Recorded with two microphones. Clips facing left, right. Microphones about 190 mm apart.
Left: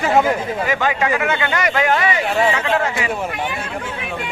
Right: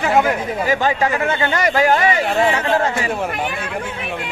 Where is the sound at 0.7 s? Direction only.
35° right (ahead or behind).